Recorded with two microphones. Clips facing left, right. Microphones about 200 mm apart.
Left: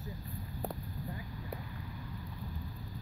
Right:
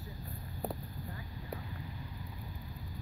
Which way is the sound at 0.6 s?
Centre (ahead or behind).